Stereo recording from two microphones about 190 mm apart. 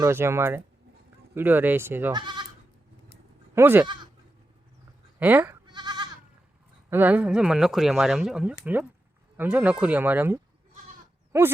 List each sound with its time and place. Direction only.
0.0 s speech: 15° right (ahead or behind)
2.1 s goat: 25° right (ahead or behind)
3.5 s speech: 10° right (ahead or behind)
5.2 s speech: 10° right (ahead or behind)
5.6 s goat: 25° right (ahead or behind)
6.9 s speech: 10° right (ahead or behind)